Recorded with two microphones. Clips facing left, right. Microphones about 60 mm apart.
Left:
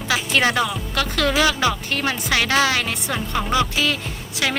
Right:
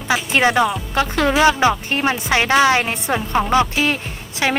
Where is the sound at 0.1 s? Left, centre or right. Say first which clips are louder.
Right 3 dB; right.